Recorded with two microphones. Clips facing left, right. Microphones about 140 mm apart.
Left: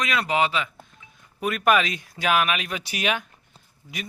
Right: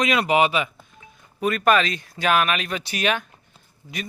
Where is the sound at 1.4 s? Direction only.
5° left (ahead or behind).